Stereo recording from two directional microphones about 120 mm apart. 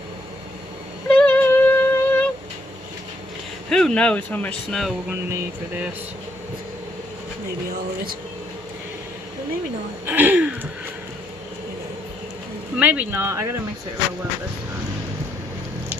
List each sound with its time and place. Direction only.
1.0 s music: 10° left (ahead or behind)
3.7 s speech: 5° left (ahead or behind)
4.8 s music: centre (ahead or behind)
5.3 s speech: 15° right (ahead or behind)
10.1 s speech: 15° right (ahead or behind)
12.8 s speech: 10° right (ahead or behind)